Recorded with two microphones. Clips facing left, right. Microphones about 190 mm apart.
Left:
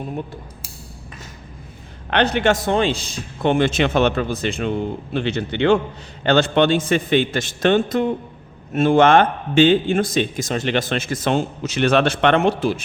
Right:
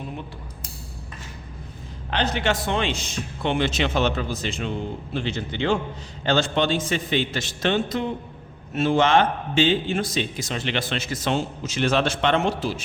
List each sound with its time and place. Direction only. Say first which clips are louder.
2.0 s speech: left 6 dB; 65° left (ahead or behind); by 3.2 s 35° left (ahead or behind)
3.4 s a man's voice: left 6 dB; 50° left (ahead or behind)